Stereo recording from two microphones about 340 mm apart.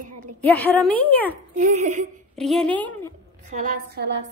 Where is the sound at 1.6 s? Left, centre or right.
Right.